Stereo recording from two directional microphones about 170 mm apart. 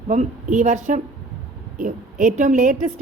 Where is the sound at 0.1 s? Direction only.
45° right (ahead or behind).